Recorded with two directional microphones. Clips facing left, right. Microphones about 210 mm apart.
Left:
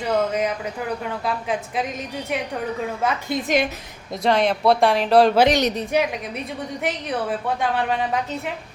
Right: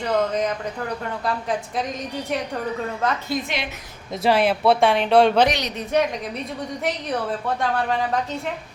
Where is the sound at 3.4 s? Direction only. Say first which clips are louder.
Left 8 dB; 45° left (ahead or behind).